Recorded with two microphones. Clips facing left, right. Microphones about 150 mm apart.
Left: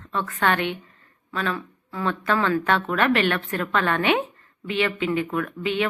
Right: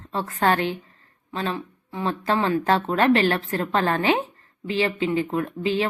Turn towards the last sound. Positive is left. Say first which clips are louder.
# right 1 dB
turn(degrees=-30)  # may be behind; listen again after turning